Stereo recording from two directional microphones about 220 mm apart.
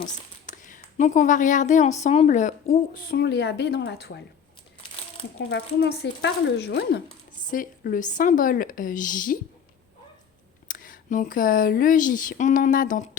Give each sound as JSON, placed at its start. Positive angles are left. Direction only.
{"t": 0.4, "sound": "speech", "side_deg": 35}
{"t": 5.5, "sound": "speech", "side_deg": 50}
{"t": 7.4, "sound": "speech", "side_deg": 40}
{"t": 10.7, "sound": "speech", "side_deg": 40}